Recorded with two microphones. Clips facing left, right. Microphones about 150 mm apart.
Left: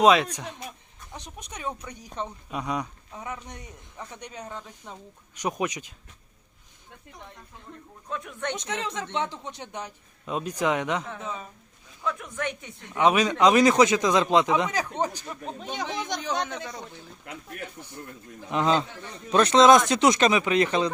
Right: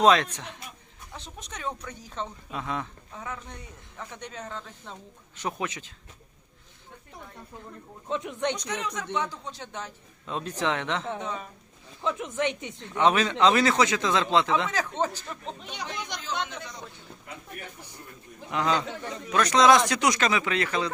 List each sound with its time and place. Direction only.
0.0 s speech: 10° left (ahead or behind)
1.1 s a sound: 15° left (ahead or behind)
1.9 s speech: 15° left (ahead or behind)
8.0 s speech: 20° right (ahead or behind)
8.5 s speech: 25° left (ahead or behind)
11.0 s speech: 30° right (ahead or behind)
12.9 s speech: 10° left (ahead or behind)
15.6 s speech: 45° left (ahead or behind)
17.3 s speech: 90° left
18.5 s speech: 20° left (ahead or behind)